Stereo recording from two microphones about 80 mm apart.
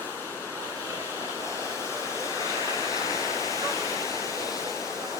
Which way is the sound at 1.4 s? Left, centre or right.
Left.